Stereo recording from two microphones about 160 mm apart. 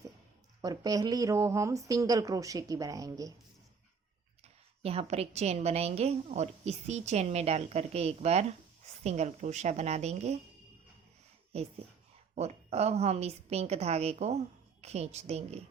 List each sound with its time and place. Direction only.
0.6 s speech: 25° right (ahead or behind)
4.8 s a woman's voice: 40° right (ahead or behind)
12.3 s a woman's voice: 45° right (ahead or behind)